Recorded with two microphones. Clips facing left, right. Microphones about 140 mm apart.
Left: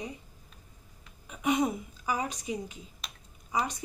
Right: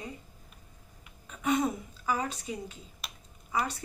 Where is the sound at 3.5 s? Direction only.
15° left (ahead or behind).